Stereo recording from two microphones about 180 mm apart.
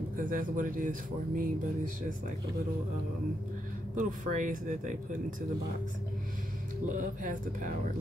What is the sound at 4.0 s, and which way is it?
Speech, 45° right (ahead or behind).